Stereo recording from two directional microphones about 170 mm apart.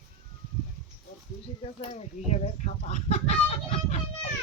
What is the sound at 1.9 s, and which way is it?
Speech, 40° left (ahead or behind).